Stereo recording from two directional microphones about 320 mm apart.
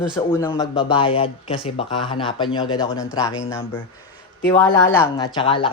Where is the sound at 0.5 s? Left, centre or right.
Centre.